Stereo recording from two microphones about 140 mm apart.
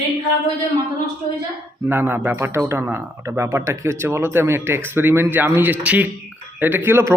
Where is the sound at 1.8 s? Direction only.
15° right (ahead or behind).